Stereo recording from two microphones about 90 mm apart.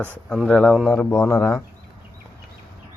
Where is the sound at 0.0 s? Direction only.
20° left (ahead or behind).